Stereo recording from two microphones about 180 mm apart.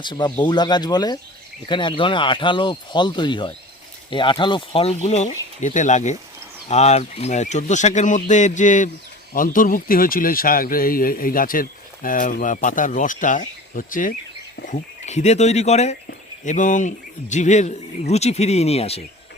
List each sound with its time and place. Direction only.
0.0 s speech: 25° left (ahead or behind)